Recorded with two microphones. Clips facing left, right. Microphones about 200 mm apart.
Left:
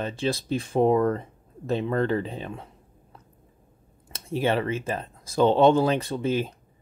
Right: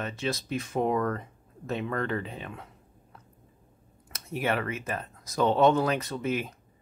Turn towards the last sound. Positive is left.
turn(degrees=30)  # may be behind; listen again after turning